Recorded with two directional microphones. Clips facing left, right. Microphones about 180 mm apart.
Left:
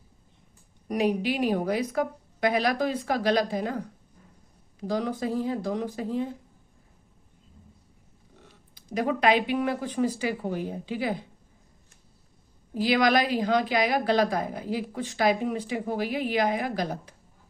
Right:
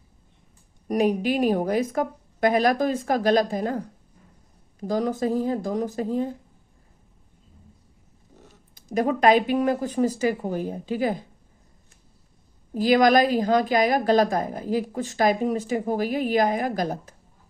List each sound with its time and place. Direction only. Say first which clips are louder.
0.9 s a woman's voice: right 3 dB; 45° right (ahead or behind)
8.4 s a woman's voice: right 3 dB; 45° right (ahead or behind)
12.7 s a woman's voice: right 5 dB; 45° right (ahead or behind)